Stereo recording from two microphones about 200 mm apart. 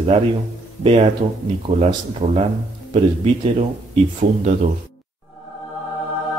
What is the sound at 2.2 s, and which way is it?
Speech, 30° right (ahead or behind).